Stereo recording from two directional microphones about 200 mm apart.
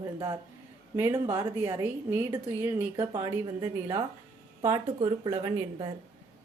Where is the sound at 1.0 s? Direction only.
15° right (ahead or behind).